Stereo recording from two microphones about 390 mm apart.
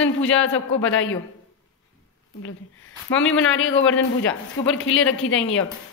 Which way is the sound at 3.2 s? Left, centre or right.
Left.